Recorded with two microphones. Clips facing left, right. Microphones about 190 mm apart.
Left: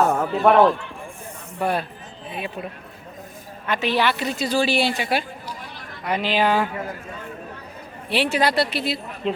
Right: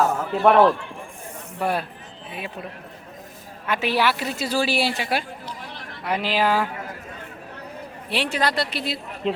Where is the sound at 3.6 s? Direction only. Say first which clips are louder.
Left 1 dB; 10° right (ahead or behind).